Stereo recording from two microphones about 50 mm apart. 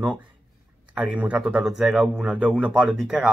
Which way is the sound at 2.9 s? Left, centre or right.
Centre.